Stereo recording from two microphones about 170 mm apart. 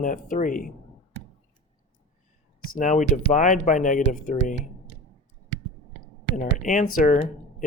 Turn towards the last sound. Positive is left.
turn(degrees=50)  # may be behind; listen again after turning